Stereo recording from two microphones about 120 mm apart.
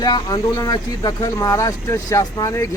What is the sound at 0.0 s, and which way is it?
Speech, 35° left (ahead or behind).